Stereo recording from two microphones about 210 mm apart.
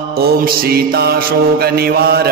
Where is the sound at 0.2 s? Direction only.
45° right (ahead or behind).